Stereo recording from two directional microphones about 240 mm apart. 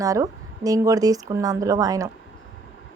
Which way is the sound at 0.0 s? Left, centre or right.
Centre.